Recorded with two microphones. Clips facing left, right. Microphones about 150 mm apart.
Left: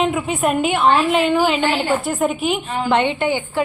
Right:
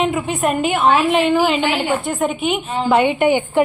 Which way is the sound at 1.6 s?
10° right (ahead or behind).